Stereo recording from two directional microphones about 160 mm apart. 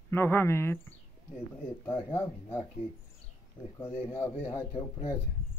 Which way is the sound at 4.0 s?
35° left (ahead or behind).